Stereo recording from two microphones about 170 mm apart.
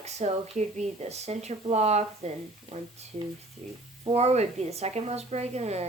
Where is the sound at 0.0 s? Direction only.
40° right (ahead or behind).